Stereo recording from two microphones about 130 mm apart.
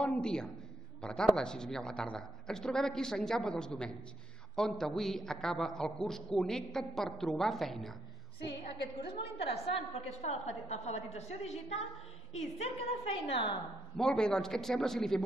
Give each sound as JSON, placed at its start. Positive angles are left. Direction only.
{"t": 0.0, "sound": "a man's voice", "side_deg": 5}
{"t": 9.4, "sound": "a woman's voice", "side_deg": 50}
{"t": 13.9, "sound": "a man's voice", "side_deg": 5}